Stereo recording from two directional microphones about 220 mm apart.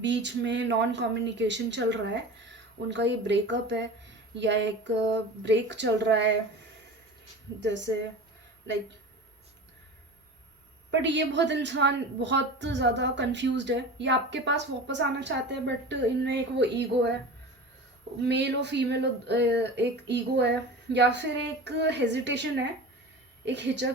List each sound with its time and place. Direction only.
0.0 s a woman's voice: 55° right (ahead or behind)
11.0 s a woman's voice: 55° right (ahead or behind)
18.3 s a woman's voice: 50° right (ahead or behind)